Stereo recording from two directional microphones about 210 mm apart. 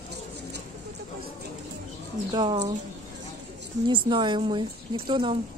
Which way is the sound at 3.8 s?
20° right (ahead or behind).